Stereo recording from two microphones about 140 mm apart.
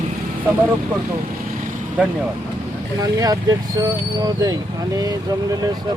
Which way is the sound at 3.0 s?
25° right (ahead or behind).